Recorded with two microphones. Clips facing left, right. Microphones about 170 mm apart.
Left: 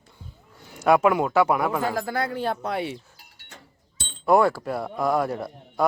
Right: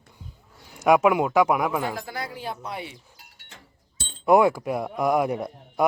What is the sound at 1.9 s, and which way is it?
Speech, 55° left (ahead or behind).